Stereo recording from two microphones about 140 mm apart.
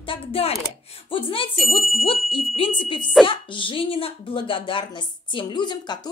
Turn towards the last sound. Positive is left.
turn(degrees=30)  # may be behind; listen again after turning